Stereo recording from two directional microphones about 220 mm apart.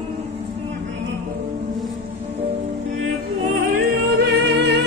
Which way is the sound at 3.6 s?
40° right (ahead or behind).